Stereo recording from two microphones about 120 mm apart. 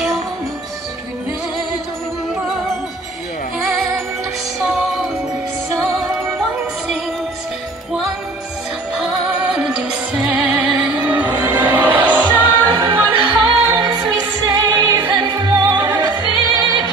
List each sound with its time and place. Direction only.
8.9 s music: 5° right (ahead or behind)
12.3 s music: 40° right (ahead or behind)